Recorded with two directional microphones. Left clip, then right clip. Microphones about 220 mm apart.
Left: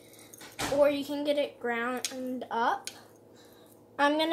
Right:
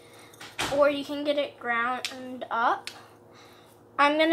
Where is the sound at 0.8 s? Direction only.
45° left (ahead or behind).